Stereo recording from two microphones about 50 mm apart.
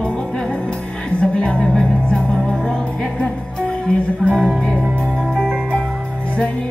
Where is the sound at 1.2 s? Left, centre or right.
Centre.